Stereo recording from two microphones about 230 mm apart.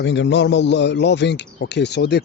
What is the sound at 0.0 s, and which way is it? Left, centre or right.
Speech, left.